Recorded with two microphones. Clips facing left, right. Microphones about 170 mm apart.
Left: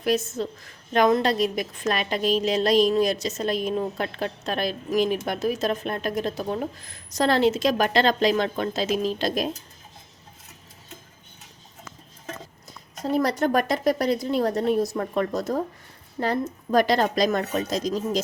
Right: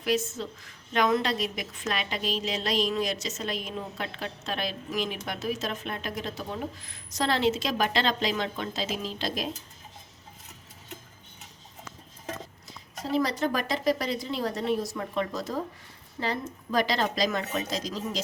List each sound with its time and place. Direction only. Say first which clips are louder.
0.0 s a woman's voice: left 4 dB; 40° left (ahead or behind)
13.1 s a woman's voice: left 5 dB; 55° left (ahead or behind)